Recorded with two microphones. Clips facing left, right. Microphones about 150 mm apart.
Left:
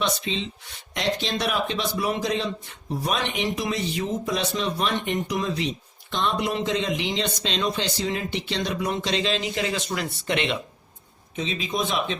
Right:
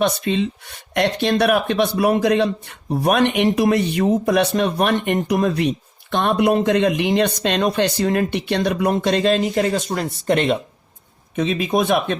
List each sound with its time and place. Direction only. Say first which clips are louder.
0.0 s speech: right 8 dB; 55° right (ahead or behind)
11.3 s speech: right 9 dB; 60° right (ahead or behind)